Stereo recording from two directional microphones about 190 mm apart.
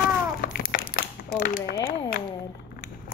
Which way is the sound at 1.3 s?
50° left (ahead or behind).